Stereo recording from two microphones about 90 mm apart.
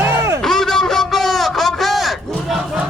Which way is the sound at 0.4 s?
5° left (ahead or behind).